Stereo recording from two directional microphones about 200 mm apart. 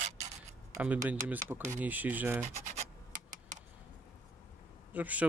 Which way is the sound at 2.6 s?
40° right (ahead or behind).